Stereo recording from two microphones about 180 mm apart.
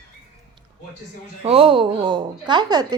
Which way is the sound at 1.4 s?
30° right (ahead or behind).